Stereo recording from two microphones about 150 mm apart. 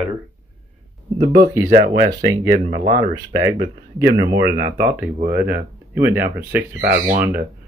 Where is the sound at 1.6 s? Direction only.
55° right (ahead or behind).